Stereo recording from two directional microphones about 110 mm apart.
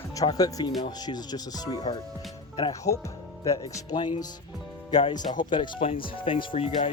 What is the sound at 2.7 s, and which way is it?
Speech, 30° left (ahead or behind).